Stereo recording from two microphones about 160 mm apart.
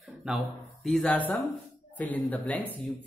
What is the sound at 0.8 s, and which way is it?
Speech, 5° left (ahead or behind).